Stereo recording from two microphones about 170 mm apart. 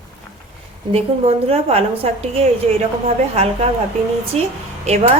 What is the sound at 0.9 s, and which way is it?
Speech, 35° right (ahead or behind).